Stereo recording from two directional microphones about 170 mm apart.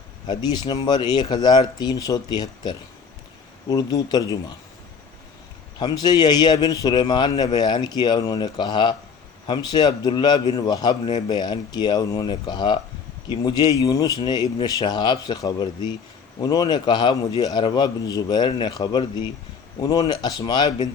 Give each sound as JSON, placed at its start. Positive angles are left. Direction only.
{"t": 0.3, "sound": "a man's voice", "side_deg": 25}
{"t": 5.8, "sound": "a man's voice", "side_deg": 25}